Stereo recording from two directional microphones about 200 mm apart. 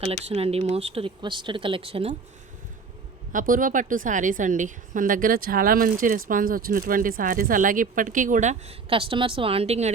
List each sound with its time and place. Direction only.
0.0 s speech: 30° right (ahead or behind)
3.3 s a woman's voice: 45° right (ahead or behind)